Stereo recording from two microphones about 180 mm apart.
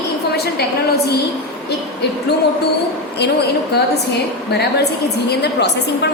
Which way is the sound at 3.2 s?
65° left (ahead or behind).